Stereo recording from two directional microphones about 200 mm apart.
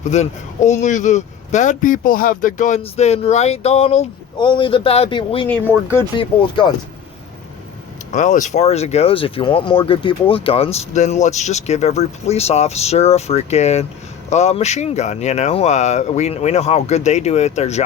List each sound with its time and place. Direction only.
0.0 s speech: 35° left (ahead or behind)
8.1 s speech: 40° left (ahead or behind)